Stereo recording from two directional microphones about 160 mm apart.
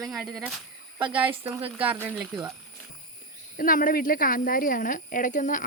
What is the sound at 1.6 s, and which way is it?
Speech, 35° right (ahead or behind).